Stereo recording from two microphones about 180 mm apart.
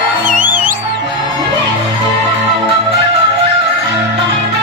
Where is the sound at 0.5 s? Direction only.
50° right (ahead or behind).